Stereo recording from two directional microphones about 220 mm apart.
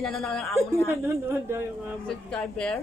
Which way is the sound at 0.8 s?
10° right (ahead or behind).